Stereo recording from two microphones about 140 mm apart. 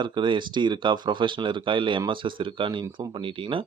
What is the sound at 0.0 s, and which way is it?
Speech, 35° right (ahead or behind).